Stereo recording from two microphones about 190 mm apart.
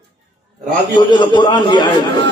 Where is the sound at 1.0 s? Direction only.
25° left (ahead or behind).